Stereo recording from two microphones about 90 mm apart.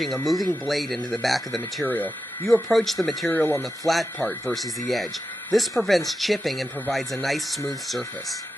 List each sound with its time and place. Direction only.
0.0 s speech: centre (ahead or behind)
3.3 s speech: 25° left (ahead or behind)
3.8 s speech: centre (ahead or behind)
4.2 s speech: 20° left (ahead or behind)
4.6 s speech: centre (ahead or behind)